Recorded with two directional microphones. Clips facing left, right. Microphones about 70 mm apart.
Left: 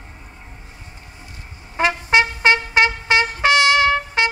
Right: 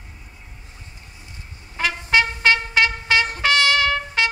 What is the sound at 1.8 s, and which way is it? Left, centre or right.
Trumpet, left.